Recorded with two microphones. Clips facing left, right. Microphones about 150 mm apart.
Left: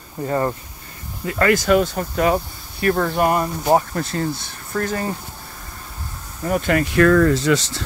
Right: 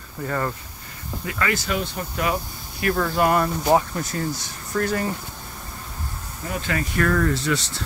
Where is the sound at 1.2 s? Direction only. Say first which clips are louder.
Left 8 dB; 45° left (ahead or behind).